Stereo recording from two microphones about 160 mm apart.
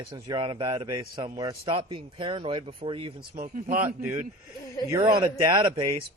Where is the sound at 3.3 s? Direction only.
60° right (ahead or behind).